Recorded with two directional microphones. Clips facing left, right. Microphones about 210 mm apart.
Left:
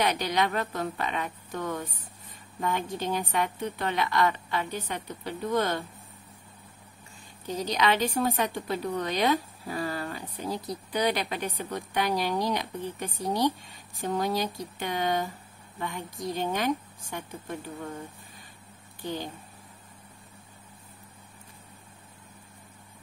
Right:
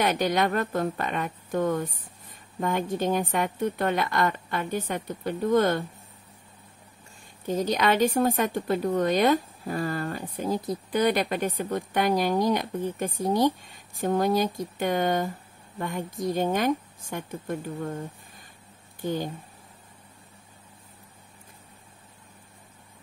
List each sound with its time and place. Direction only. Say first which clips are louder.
0.0 s speech: right 3 dB; 50° right (ahead or behind)
7.4 s speech: right 3 dB; 50° right (ahead or behind)
18.9 s speech: right 5 dB; 50° right (ahead or behind)